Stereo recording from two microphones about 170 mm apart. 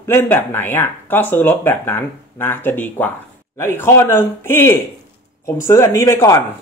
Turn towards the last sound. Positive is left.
turn(degrees=15)  # may be behind; listen again after turning